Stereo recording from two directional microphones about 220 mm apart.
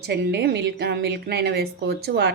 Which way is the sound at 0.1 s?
50° right (ahead or behind).